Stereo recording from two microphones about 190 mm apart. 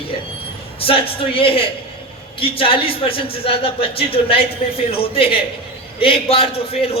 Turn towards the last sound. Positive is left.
turn(degrees=30)  # may be behind; listen again after turning